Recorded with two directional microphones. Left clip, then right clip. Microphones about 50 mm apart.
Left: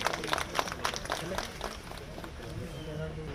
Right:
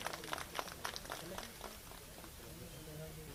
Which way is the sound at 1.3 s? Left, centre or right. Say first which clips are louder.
Left 12 dB; right.